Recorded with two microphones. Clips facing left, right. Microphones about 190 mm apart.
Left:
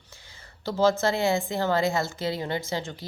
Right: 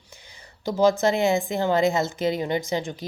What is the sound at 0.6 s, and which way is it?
A woman's voice, 15° right (ahead or behind).